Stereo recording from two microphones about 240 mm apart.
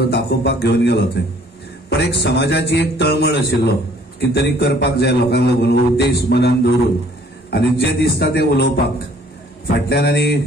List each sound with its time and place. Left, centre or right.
0.1 s a man's voice: left
7.5 s a man's voice: left
9.8 s a man's voice: left